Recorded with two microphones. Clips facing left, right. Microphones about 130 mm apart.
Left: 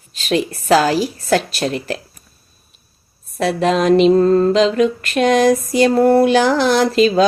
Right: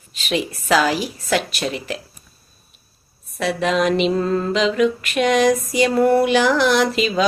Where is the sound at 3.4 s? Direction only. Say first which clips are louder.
Left 3 dB; 35° left (ahead or behind).